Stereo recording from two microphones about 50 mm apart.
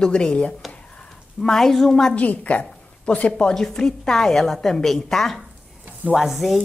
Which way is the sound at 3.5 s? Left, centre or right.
Centre.